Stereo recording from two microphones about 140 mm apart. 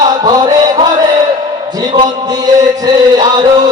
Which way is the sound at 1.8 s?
30° right (ahead or behind).